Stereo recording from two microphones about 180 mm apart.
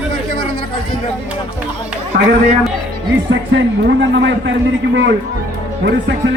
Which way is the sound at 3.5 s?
80° right.